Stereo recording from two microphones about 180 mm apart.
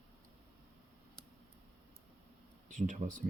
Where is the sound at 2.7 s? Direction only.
45° right (ahead or behind).